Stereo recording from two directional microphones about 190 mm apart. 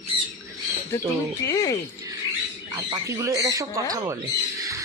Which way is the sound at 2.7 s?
15° right (ahead or behind).